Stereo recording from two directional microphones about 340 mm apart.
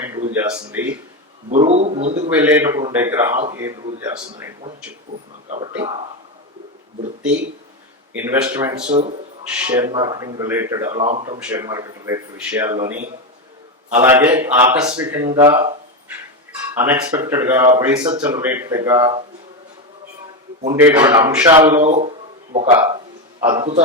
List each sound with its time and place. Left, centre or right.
0.8 s a man's voice: centre
1.5 s a man's voice: centre
2.3 s speech: centre
7.2 s a man's voice: centre
8.9 s speech: centre
9.6 s speech: centre
11.3 s a man's voice: centre
20.8 s speech: centre
21.8 s a man's voice: centre
23.4 s a man's voice: centre